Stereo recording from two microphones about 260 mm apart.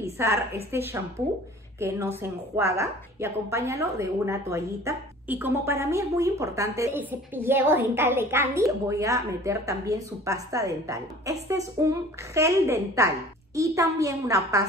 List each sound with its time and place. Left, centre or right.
0.0 s a woman's voice: centre